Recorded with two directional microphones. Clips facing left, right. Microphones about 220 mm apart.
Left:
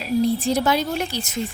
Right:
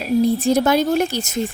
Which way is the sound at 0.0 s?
45° right (ahead or behind).